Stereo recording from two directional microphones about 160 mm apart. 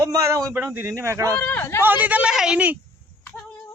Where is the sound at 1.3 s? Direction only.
10° left (ahead or behind).